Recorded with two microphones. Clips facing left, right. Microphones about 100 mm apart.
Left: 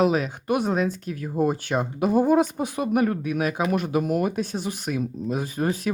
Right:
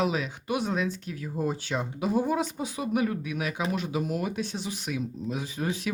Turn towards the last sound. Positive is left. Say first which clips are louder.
# left 6 dB
turn(degrees=45)  # may be behind; listen again after turning